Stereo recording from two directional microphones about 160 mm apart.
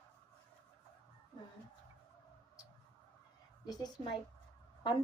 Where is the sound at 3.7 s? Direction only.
25° left (ahead or behind).